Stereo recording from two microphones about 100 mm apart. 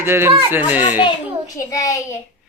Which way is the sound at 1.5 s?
35° left (ahead or behind).